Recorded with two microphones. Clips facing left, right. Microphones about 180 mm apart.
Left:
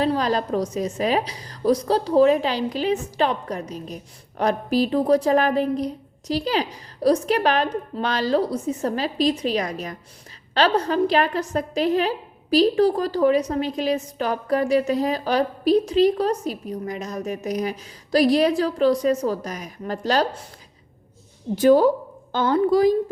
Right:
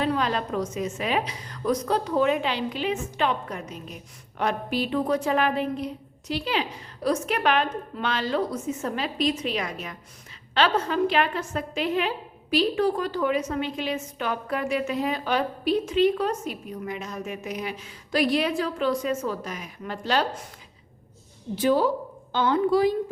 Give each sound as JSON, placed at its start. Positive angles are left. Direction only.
{"t": 0.0, "sound": "a woman's voice", "side_deg": 35}
{"t": 21.5, "sound": "a woman's voice", "side_deg": 45}